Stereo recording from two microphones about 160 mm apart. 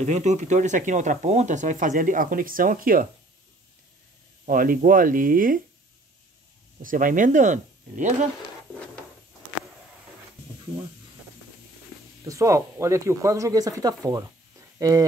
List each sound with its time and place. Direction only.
0.0 s speech: 45° right (ahead or behind)
4.5 s speech: 60° right (ahead or behind)
6.8 s speech: 55° right (ahead or behind)
12.3 s speech: 20° right (ahead or behind)